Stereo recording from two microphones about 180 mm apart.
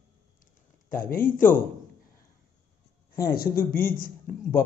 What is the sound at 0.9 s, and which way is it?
Speech, 50° left (ahead or behind).